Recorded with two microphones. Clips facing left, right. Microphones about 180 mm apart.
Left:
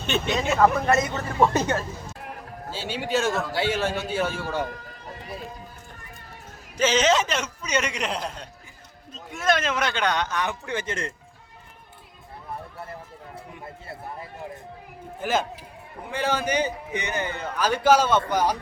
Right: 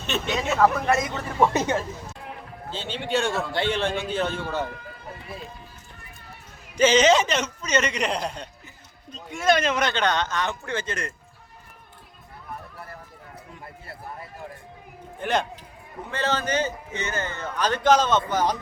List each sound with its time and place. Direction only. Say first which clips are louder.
0.0 s a man's voice: left 2 dB; centre (ahead or behind)
1.5 s speech: even; 15° right (ahead or behind)
2.1 s music: left 1 dB; 45° left (ahead or behind)
2.7 s a man's voice: even; 5° left (ahead or behind)
4.6 s run: even; 40° left (ahead or behind)
6.7 s a man's voice: right 3 dB; centre (ahead or behind); by 11.1 s 20° left (ahead or behind)
12.5 s run: left 3 dB; 25° left (ahead or behind)
15.2 s a man's voice: even; 5° left (ahead or behind)